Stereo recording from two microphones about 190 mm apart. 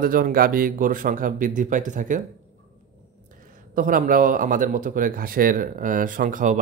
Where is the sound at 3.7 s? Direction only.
45° right (ahead or behind).